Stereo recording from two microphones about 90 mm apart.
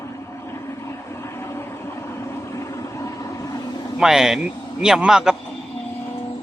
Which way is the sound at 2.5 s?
35° left (ahead or behind).